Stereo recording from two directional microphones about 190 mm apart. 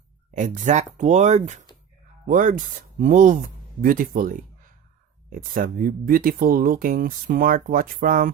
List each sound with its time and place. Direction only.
0.3 s speech: 40° right (ahead or behind)